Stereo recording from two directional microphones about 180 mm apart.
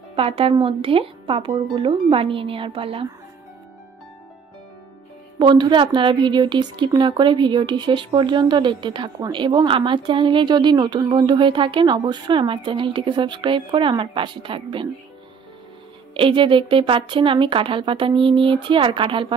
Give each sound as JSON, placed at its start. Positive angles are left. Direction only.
{"t": 0.1, "sound": "speech", "side_deg": -30}
{"t": 5.4, "sound": "speech", "side_deg": -25}
{"t": 16.2, "sound": "speech", "side_deg": -30}